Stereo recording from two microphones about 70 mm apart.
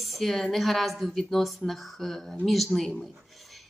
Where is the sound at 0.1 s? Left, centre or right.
Centre.